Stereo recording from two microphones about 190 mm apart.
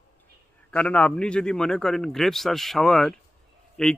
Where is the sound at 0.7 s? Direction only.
5° left (ahead or behind).